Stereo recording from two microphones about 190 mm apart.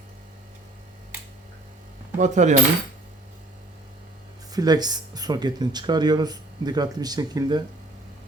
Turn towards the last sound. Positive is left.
turn(degrees=-20)  # may be behind; listen again after turning